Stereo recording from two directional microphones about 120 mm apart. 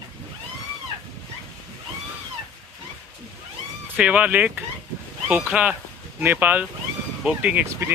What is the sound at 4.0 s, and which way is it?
Speech, 10° right (ahead or behind).